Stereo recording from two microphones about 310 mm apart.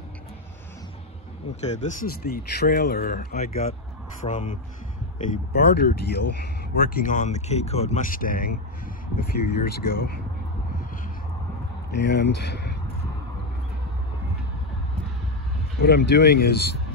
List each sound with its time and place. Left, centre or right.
1.6 s speech: left
9.6 s speech: left
11.9 s speech: left
15.8 s speech: left